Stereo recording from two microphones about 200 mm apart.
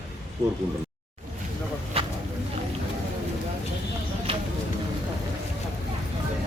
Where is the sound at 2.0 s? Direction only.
30° right (ahead or behind).